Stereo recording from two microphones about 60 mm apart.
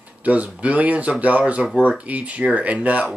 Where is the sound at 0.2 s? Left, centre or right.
Right.